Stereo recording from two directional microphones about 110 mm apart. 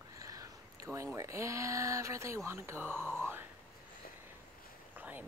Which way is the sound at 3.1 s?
20° right (ahead or behind).